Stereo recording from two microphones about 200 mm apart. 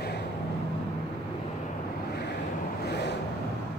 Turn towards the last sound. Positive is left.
turn(degrees=55)  # may be behind; listen again after turning